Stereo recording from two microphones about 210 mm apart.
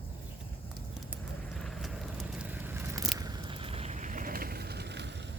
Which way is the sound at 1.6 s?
Centre (ahead or behind).